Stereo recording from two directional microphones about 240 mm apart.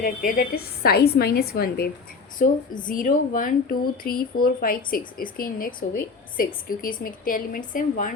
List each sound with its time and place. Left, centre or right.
0.0 s speech: left